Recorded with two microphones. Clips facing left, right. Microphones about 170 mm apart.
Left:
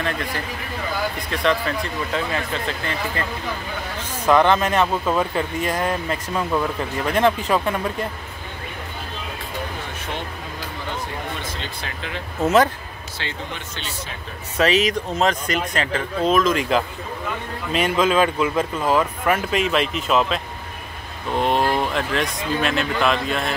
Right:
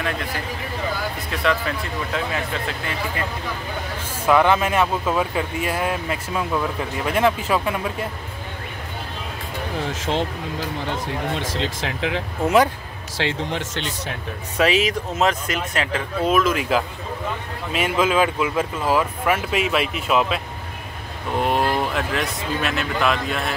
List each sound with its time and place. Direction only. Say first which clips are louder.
1.3 s speech: left 1 dB; 5° right (ahead or behind)
4.3 s speech: left 1 dB; 5° right (ahead or behind)
11.3 s speech: right 6 dB; 90° right
13.2 s speech: right 8 dB; 90° right; by 14.1 s 70° right (ahead or behind)
14.6 s speech: left 1 dB; 10° right (ahead or behind)